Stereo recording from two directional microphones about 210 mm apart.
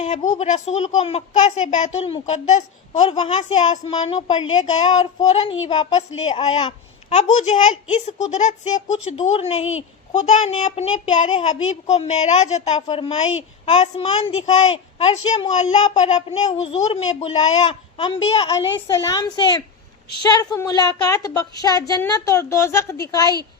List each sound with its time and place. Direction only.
0.3 s a woman's voice: 35° left (ahead or behind)
3.0 s a woman's voice: 25° left (ahead or behind)